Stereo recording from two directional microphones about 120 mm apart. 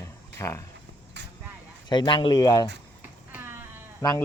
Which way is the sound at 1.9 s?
40° left (ahead or behind).